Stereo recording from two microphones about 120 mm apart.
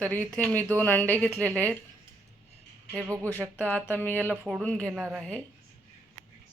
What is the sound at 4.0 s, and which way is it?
Speech, 15° left (ahead or behind).